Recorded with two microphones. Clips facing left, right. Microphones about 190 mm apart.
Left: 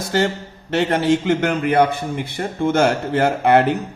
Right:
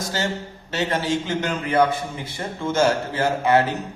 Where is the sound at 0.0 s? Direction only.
60° left (ahead or behind).